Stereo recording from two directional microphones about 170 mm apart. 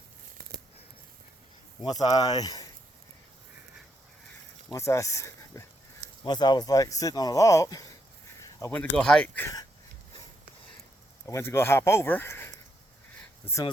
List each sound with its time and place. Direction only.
1.9 s speech: 20° left (ahead or behind)
4.7 s speech: 15° left (ahead or behind)
11.3 s speech: 15° left (ahead or behind)